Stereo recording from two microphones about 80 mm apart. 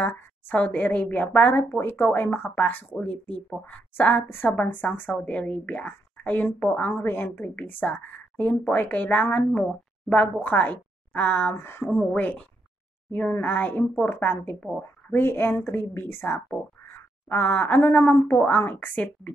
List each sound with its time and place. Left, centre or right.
0.0 s a woman's voice: left
6.9 s a woman's voice: left
12.1 s a woman's voice: centre